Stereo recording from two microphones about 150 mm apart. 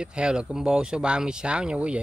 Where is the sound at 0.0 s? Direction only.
5° right (ahead or behind).